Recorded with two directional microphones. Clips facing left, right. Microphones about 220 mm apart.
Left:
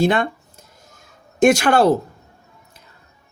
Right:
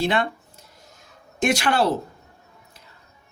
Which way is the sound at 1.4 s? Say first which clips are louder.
Left 7 dB; 45° left (ahead or behind).